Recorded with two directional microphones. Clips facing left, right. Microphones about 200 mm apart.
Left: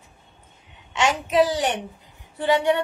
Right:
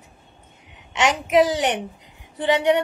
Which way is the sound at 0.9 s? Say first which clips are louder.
Right 1 dB; 20° right (ahead or behind).